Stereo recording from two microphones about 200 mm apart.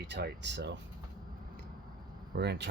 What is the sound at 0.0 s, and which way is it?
Speech, 60° right (ahead or behind).